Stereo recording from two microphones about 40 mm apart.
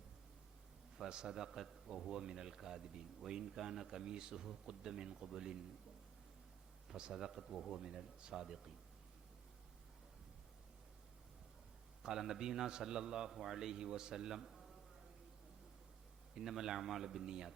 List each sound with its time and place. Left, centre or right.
0.9 s a man's voice: centre
7.1 s a man's voice: centre
7.8 s a man's voice: centre
12.0 s a man's voice: centre
14.4 s a sound: centre
16.3 s a man's voice: centre